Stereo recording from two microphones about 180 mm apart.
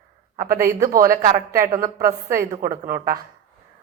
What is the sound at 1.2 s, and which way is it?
Speech, 20° right (ahead or behind).